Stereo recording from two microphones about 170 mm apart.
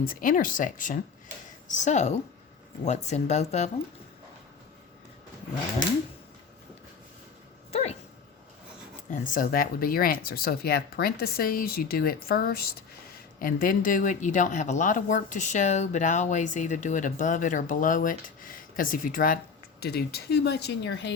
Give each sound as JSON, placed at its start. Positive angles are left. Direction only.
{"t": 0.0, "sound": "speech", "side_deg": 55}
{"t": 7.7, "sound": "dog", "side_deg": 40}
{"t": 9.0, "sound": "speech", "side_deg": 50}
{"t": 19.8, "sound": "speech", "side_deg": 70}